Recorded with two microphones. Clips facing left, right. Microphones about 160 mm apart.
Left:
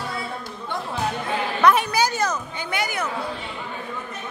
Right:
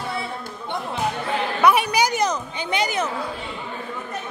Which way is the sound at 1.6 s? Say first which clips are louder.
Even; 10° right (ahead or behind).